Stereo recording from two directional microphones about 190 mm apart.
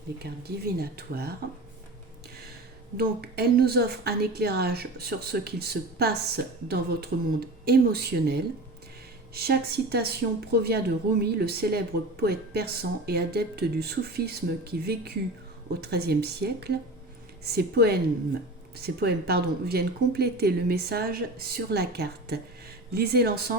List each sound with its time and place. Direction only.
0.2 s speech: 55° right (ahead or behind)
3.0 s speech: 55° right (ahead or behind)